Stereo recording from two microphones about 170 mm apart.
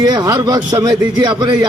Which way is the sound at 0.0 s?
25° right (ahead or behind).